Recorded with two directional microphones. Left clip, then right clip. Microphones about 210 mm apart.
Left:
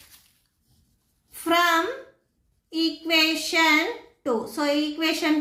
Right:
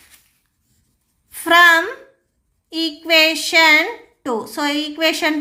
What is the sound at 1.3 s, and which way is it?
A woman's voice, 55° right (ahead or behind).